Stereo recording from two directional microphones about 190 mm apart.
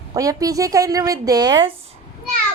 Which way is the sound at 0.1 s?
20° right (ahead or behind).